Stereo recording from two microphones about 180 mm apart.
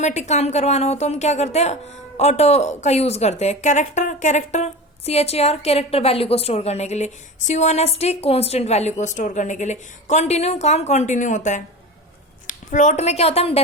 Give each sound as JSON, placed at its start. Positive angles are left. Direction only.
{"t": 0.0, "sound": "a woman's voice", "side_deg": 40}